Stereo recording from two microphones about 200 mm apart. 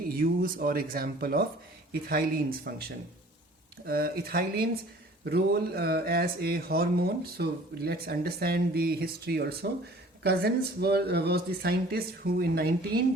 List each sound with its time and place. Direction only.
0.1 s speech: 45° right (ahead or behind)
3.8 s speech: 50° right (ahead or behind)